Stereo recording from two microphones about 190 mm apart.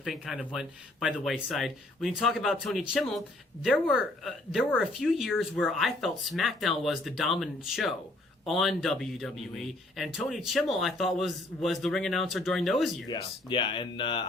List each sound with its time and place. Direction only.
0.0 s speech: centre (ahead or behind)
13.1 s speech: 25° left (ahead or behind)